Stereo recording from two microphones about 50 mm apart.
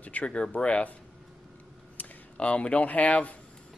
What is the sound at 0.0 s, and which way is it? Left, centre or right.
Speech, left.